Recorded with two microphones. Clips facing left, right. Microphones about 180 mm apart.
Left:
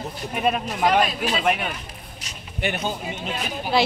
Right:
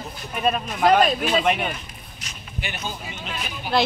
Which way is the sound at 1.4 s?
5° left (ahead or behind).